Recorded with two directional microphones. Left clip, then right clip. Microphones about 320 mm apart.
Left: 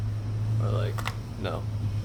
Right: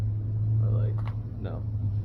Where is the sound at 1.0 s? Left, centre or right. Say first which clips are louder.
Left 7 dB; centre.